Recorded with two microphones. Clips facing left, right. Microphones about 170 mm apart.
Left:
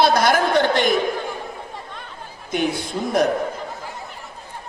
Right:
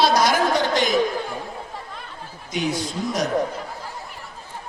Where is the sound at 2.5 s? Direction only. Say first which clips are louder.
Left 2 dB; 55° left (ahead or behind).